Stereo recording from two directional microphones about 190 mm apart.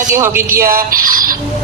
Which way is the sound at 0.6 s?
50° right (ahead or behind).